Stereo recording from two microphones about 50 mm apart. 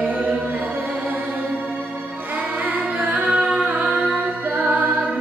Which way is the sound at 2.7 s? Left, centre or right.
Right.